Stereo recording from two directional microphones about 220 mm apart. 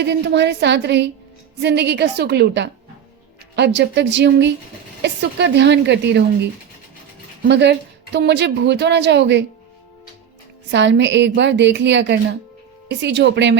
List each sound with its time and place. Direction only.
0.0 s a woman's voice: 50° right (ahead or behind)
7.4 s a woman's voice: 50° right (ahead or behind)
10.7 s a woman's voice: 55° right (ahead or behind)